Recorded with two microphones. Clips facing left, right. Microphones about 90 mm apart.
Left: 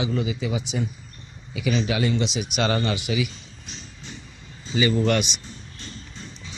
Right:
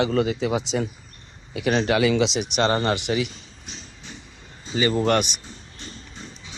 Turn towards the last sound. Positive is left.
turn(degrees=-40)  # may be behind; listen again after turning